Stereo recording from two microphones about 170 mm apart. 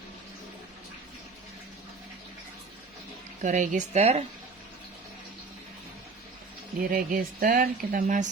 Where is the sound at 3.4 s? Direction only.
45° right (ahead or behind).